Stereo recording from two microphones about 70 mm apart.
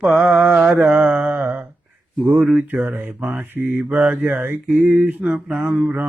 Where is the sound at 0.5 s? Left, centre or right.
Centre.